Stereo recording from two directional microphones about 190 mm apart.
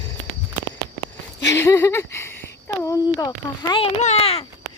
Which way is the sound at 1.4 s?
15° left (ahead or behind).